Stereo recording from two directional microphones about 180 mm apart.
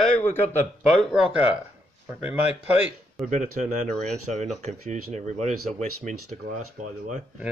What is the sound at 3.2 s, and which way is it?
Speech, 45° right (ahead or behind).